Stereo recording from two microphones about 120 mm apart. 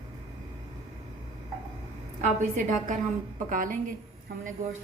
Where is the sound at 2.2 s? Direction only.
90° right.